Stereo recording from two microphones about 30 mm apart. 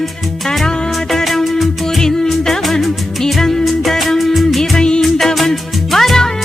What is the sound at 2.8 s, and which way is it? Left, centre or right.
Music, centre.